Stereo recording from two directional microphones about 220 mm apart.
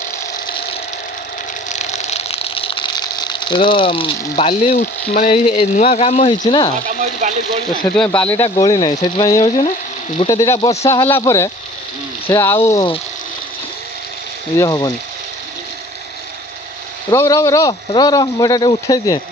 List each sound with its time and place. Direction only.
0.4 s ratchet: 20° left (ahead or behind)
1.7 s speech: 30° left (ahead or behind)
6.8 s speech: 35° right (ahead or behind)
7.9 s speech: 5° left (ahead or behind)
8.4 s speech: 20° left (ahead or behind)
14.6 s speech: 15° left (ahead or behind)
17.1 s speech: 15° left (ahead or behind)